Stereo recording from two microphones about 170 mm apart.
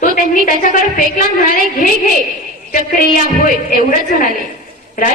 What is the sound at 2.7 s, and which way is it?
A woman's voice, 55° left (ahead or behind).